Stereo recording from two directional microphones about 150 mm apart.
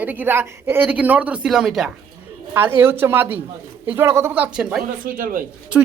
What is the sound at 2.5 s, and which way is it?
Speech, 15° right (ahead or behind).